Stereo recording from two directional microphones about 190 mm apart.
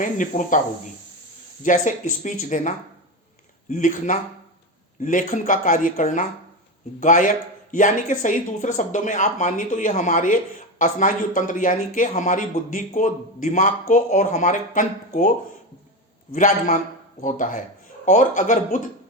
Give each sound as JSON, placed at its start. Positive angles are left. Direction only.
{"t": 0.0, "sound": "speech", "side_deg": 45}
{"t": 1.6, "sound": "speech", "side_deg": 45}
{"t": 16.3, "sound": "speech", "side_deg": 45}